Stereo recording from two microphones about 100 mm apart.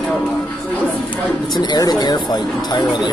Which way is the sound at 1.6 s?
45° left (ahead or behind).